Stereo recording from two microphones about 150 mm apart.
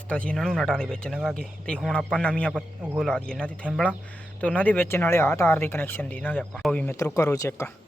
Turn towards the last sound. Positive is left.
turn(degrees=20)  # may be behind; listen again after turning